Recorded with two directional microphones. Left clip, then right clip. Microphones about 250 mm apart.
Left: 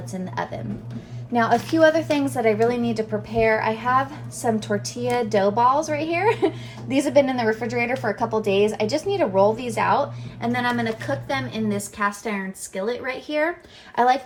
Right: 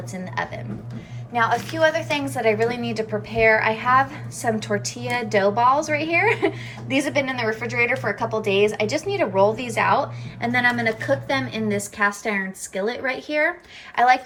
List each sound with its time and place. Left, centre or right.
0.1 s a woman's voice: centre
2.1 s a woman's voice: centre